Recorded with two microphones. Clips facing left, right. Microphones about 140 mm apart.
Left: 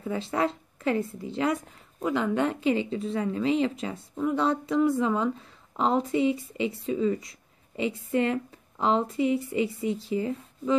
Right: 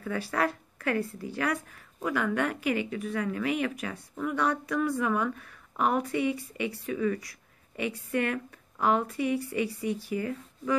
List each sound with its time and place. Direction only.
0.0 s speech: 25° left (ahead or behind)